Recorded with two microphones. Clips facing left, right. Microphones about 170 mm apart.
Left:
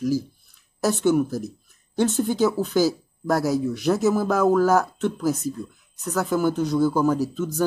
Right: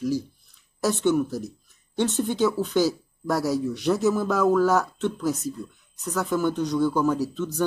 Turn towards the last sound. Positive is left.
turn(degrees=5)  # may be behind; listen again after turning